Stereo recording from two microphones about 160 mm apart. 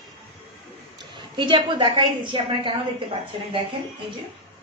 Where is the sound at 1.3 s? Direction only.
30° right (ahead or behind).